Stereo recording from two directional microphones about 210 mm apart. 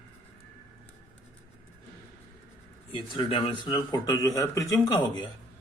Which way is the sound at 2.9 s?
25° left (ahead or behind).